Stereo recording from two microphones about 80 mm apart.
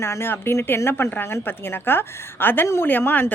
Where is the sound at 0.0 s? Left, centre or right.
Left.